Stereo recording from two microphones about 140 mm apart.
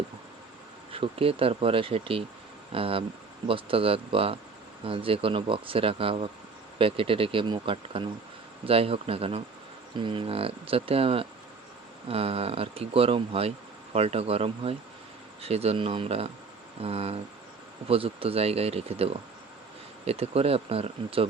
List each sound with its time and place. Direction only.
0.9 s speech: 40° right (ahead or behind)